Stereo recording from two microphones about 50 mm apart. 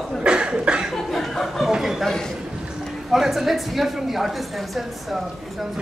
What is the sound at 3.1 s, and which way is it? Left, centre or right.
A woman's voice, centre.